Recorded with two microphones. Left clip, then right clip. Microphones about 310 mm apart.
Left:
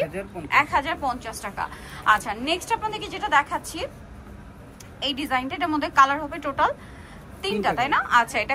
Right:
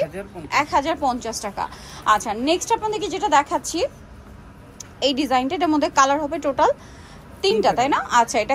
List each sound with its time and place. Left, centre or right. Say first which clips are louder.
0.5 s a woman's voice: right 1 dB; centre
5.0 s a woman's voice: right 6 dB; right